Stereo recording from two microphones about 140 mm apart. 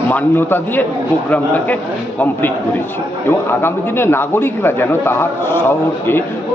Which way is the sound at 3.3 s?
15° left (ahead or behind).